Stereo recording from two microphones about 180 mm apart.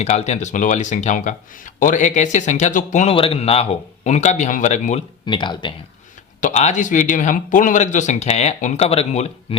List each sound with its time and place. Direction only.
0.0 s speech: 40° left (ahead or behind)
5.2 s speech: 25° left (ahead or behind)
6.4 s speech: 40° left (ahead or behind)